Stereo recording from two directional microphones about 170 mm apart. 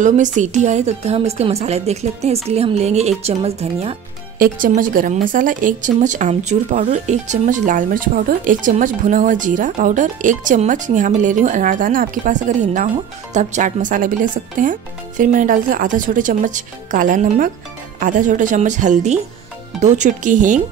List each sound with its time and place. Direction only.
0.0 s a woman's voice: 45° right (ahead or behind)
4.4 s speech: 55° right (ahead or behind)